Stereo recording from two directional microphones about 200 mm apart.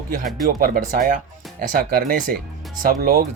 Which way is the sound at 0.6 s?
45° right (ahead or behind).